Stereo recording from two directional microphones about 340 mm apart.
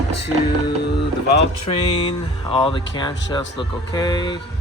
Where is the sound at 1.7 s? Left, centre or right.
Centre.